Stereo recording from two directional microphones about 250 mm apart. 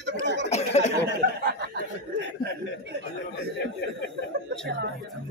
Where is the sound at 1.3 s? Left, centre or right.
Right.